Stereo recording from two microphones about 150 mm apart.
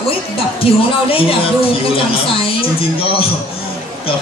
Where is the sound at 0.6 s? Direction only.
40° left (ahead or behind).